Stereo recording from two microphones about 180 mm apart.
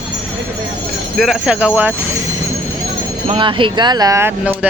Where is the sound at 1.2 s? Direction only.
5° right (ahead or behind).